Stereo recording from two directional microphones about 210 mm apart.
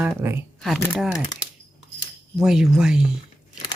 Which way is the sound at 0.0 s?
10° right (ahead or behind).